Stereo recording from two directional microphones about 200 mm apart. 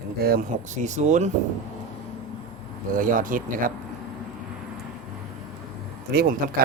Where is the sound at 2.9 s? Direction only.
45° right (ahead or behind).